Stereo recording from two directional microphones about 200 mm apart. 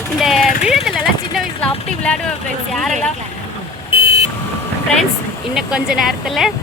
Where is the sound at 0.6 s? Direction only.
Centre (ahead or behind).